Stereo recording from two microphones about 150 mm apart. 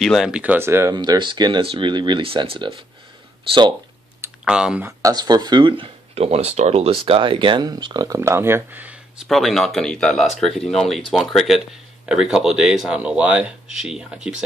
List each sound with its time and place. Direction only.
0.0 s speech: centre (ahead or behind); by 0.9 s 15° right (ahead or behind)
0.9 s speech: 30° right (ahead or behind)
4.5 s speech: 5° right (ahead or behind)
4.8 s speech: 25° right (ahead or behind)
6.1 s speech: 45° right (ahead or behind); by 14.4 s 5° right (ahead or behind)